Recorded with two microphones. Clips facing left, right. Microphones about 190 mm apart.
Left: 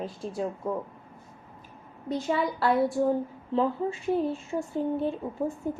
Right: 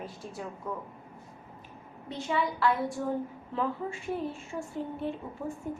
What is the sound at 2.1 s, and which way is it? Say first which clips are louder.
A woman's voice: left 4 dB; 40° left (ahead or behind).